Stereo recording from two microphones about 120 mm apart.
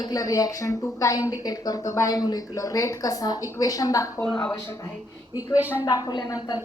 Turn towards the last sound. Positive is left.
turn(degrees=35)  # may be behind; listen again after turning